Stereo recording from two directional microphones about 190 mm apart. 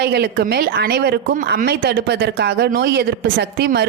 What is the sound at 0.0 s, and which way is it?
A woman's voice, 60° right (ahead or behind).